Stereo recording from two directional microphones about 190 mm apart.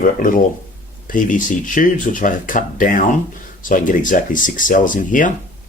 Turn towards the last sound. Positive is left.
turn(degrees=45)  # may be behind; listen again after turning